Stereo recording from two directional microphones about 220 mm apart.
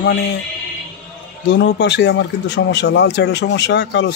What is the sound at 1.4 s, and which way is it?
Speech, 55° left (ahead or behind).